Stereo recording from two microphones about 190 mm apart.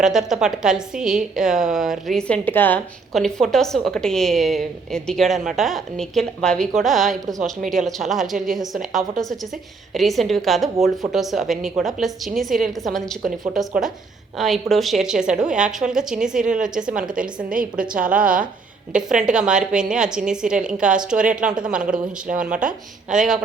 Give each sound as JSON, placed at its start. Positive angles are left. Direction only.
{"t": 0.0, "sound": "a woman's voice", "side_deg": 0}
{"t": 17.5, "sound": "a woman's voice", "side_deg": -45}
{"t": 18.9, "sound": "a woman's voice", "side_deg": -5}